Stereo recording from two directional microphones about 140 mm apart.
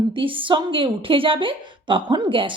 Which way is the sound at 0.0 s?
40° right (ahead or behind).